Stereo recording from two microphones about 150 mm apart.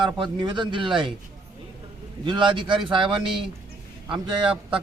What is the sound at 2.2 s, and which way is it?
Speech, 30° right (ahead or behind).